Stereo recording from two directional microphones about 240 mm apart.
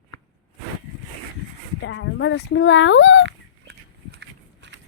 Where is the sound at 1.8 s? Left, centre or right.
Left.